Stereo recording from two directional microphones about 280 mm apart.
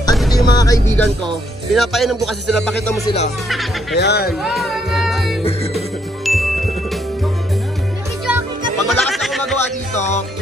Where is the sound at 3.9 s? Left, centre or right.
Left.